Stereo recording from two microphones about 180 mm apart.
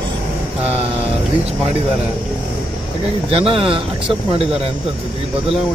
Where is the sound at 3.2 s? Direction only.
30° right (ahead or behind).